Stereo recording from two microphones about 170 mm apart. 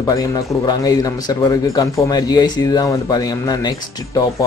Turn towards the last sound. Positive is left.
turn(degrees=20)  # may be behind; listen again after turning